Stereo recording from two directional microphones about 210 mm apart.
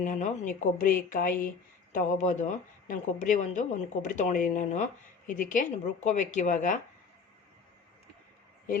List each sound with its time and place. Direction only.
0.0 s speech: 35° left (ahead or behind)